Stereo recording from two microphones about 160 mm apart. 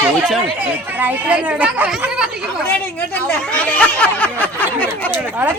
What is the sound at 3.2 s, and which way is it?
Speech, 10° left (ahead or behind).